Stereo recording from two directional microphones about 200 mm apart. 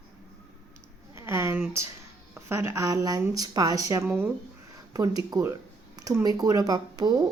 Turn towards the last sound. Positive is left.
turn(degrees=-20)  # may be behind; listen again after turning